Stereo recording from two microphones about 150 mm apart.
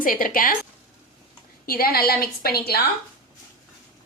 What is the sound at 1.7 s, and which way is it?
A woman's voice, 85° left.